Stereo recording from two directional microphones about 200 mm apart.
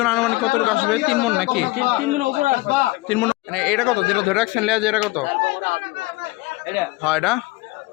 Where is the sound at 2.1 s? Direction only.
45° right (ahead or behind).